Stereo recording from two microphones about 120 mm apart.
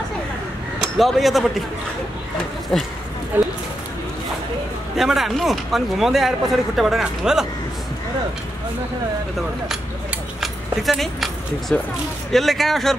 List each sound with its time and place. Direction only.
0.9 s speech: centre (ahead or behind)
2.7 s speech: 5° left (ahead or behind)
3.3 s a sound: 15° right (ahead or behind)
4.9 s speech: centre (ahead or behind)
10.4 s keys jangling: centre (ahead or behind)
11.7 s speech: 10° left (ahead or behind)